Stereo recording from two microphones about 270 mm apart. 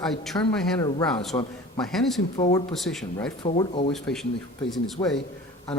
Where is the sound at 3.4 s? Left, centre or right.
Centre.